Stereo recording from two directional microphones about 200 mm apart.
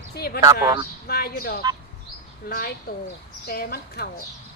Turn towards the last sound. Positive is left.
turn(degrees=50)  # may be behind; listen again after turning